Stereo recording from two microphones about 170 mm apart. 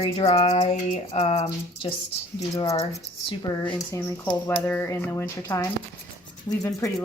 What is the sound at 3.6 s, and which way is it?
Speech, 10° left (ahead or behind).